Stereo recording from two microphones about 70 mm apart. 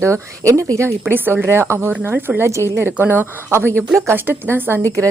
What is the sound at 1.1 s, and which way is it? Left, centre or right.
Speech, right.